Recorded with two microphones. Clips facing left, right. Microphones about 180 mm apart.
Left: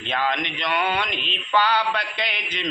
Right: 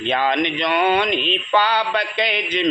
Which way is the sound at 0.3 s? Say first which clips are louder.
Right 9 dB; 90° right.